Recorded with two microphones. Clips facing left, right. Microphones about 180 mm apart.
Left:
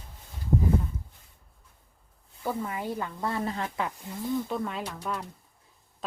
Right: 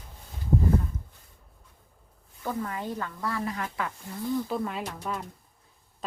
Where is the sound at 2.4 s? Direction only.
10° left (ahead or behind).